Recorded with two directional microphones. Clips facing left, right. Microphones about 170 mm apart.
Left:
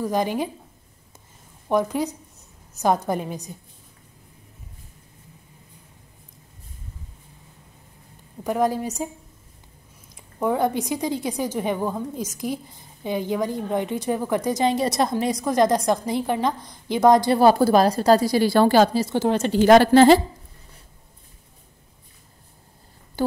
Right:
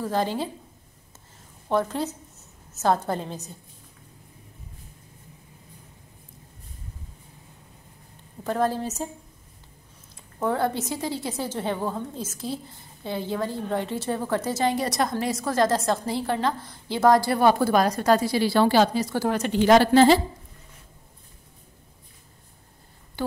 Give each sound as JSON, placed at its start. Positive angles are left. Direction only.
{"t": 0.0, "sound": "a woman's voice", "side_deg": 15}
{"t": 1.7, "sound": "a woman's voice", "side_deg": 15}
{"t": 8.5, "sound": "a woman's voice", "side_deg": 15}
{"t": 10.1, "sound": "a woman's voice", "side_deg": 15}
{"t": 17.4, "sound": "a woman's voice", "side_deg": 35}
{"t": 18.9, "sound": "a woman's voice", "side_deg": 25}
{"t": 19.6, "sound": "a woman's voice", "side_deg": 50}
{"t": 23.2, "sound": "speech", "side_deg": 40}